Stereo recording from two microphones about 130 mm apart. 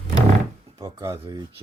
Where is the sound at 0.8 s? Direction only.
25° right (ahead or behind).